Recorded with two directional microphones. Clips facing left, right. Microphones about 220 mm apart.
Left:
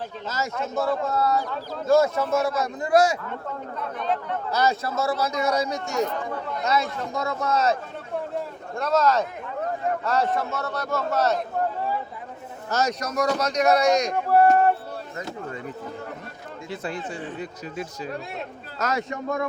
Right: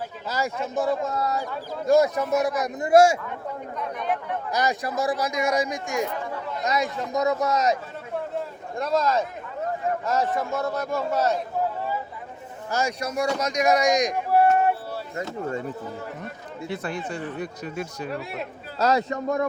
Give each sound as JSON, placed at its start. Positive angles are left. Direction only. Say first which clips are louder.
{"t": 0.5, "sound": "speech", "louder": "left 1 dB", "side_deg": -15}
{"t": 3.8, "sound": "speech", "louder": "left 1 dB", "side_deg": -15}
{"t": 12.7, "sound": "speech", "louder": "left 1 dB", "side_deg": -10}
{"t": 16.6, "sound": "speech", "louder": "right 1 dB", "side_deg": -60}
{"t": 18.8, "sound": "a man's voice", "louder": "right 5 dB", "side_deg": -35}